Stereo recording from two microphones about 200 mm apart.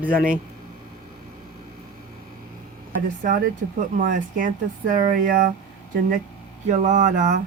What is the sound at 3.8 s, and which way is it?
Speech, 40° right (ahead or behind).